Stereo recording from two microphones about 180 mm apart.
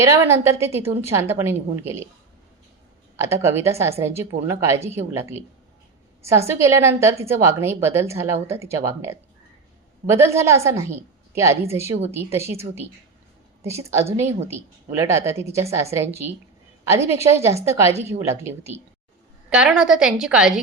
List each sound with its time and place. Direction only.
0.0 s a woman's voice: 15° right (ahead or behind)
3.2 s a woman's voice: 15° right (ahead or behind)
6.5 s a woman's voice: 15° right (ahead or behind)
13.7 s a woman's voice: 15° right (ahead or behind)